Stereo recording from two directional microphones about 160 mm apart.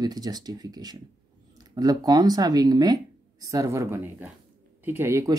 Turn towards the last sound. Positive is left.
turn(degrees=-20)  # may be behind; listen again after turning